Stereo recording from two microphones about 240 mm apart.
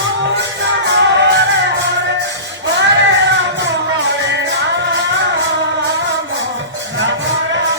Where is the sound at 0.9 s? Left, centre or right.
Right.